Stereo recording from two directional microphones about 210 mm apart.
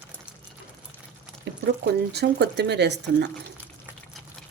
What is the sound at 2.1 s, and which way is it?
Speech, 50° right (ahead or behind).